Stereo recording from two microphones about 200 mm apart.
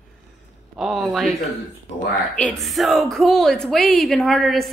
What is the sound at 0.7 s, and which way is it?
Speech, centre (ahead or behind).